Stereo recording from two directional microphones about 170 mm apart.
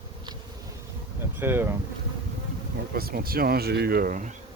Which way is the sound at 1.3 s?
15° right (ahead or behind).